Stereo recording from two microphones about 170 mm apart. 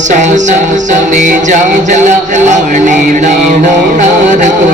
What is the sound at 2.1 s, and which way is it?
Speech, 45° right (ahead or behind).